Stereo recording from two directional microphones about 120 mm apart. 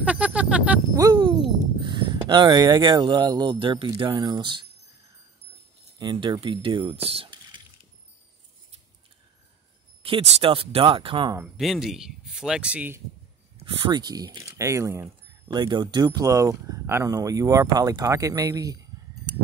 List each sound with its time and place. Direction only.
0.0 s a sound: 10° right (ahead or behind)
0.9 s a sound: 35° right (ahead or behind)
4.0 s speech: 35° right (ahead or behind)
5.9 s speech: 40° right (ahead or behind)
7.0 s mechanisms: 55° right (ahead or behind)
10.0 s speech: 50° right (ahead or behind)
11.4 s speech: centre (ahead or behind)
13.9 s speech: 35° right (ahead or behind)
15.4 s speech: 40° right (ahead or behind)